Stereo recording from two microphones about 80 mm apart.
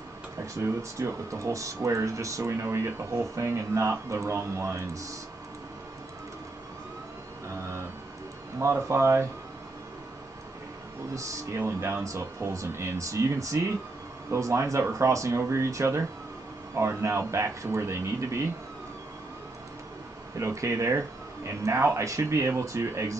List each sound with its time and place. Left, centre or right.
0.6 s speech: right
8.5 s speech: right
11.1 s speech: right
20.3 s speech: right